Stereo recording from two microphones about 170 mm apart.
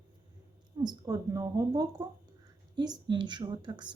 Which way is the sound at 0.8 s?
25° right (ahead or behind).